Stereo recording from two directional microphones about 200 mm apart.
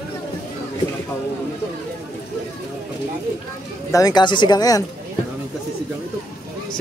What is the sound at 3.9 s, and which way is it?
Speech, 20° left (ahead or behind).